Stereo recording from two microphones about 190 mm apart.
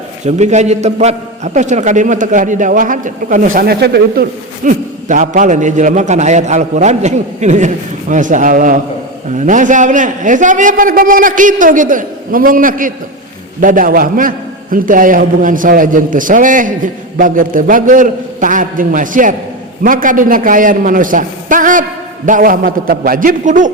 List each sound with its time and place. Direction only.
0.3 s a man's voice: 35° right (ahead or behind)